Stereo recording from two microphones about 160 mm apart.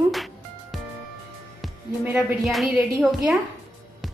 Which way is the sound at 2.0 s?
5° right (ahead or behind).